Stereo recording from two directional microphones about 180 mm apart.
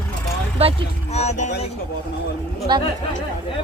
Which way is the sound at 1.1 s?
40° left (ahead or behind).